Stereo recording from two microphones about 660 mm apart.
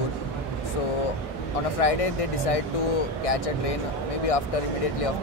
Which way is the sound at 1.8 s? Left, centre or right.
Left.